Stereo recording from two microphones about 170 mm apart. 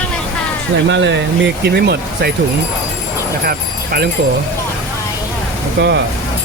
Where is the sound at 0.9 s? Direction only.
90° right.